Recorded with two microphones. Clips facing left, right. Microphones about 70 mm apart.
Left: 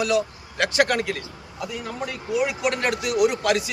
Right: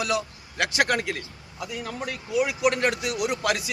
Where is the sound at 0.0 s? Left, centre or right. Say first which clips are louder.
Left 5 dB; centre.